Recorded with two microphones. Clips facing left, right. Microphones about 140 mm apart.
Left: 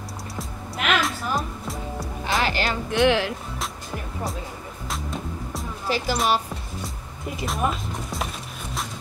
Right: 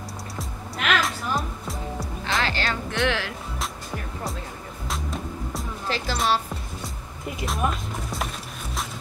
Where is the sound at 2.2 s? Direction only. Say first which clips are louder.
Left 3 dB; 15° left (ahead or behind).